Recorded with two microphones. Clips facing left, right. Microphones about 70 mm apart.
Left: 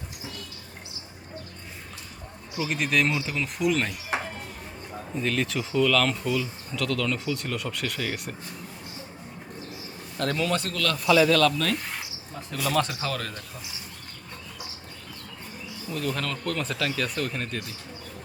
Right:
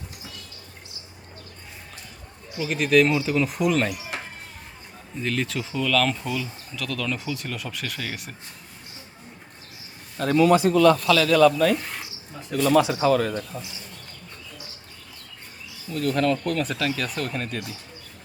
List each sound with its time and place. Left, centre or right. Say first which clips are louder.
2.6 s speech: right 6 dB; centre
4.1 s a sound: left 5 dB; left
5.2 s speech: right 1 dB; centre
10.2 s speech: right 8 dB; centre
10.9 s a man's voice: left 1 dB; centre
11.3 s speech: right 5 dB; centre
15.9 s speech: right 7 dB; centre